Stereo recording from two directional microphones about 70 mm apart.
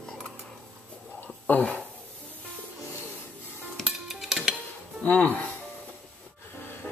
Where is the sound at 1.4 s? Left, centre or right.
Left.